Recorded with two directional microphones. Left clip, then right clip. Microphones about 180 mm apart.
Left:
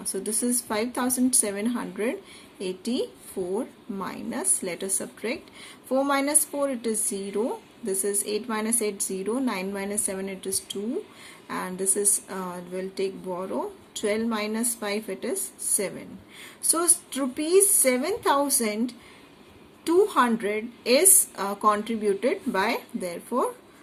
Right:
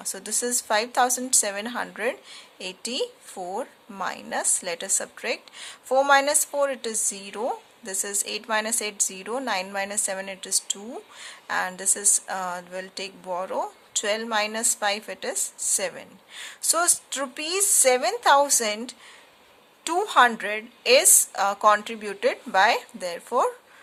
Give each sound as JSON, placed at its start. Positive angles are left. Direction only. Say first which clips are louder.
{"t": 0.0, "sound": "a woman's voice", "louder": "even", "side_deg": -45}